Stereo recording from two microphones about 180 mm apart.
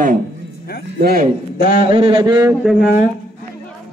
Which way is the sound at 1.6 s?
55° left (ahead or behind).